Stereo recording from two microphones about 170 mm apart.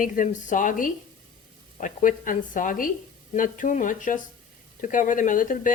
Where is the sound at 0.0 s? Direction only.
50° left (ahead or behind).